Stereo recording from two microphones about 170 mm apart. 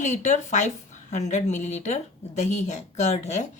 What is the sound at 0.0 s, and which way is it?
Speech, 45° left (ahead or behind).